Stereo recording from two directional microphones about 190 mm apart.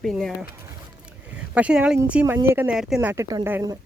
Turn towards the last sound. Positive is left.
turn(degrees=-10)  # may be behind; listen again after turning